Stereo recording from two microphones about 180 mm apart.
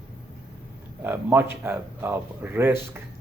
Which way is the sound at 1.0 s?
10° right (ahead or behind).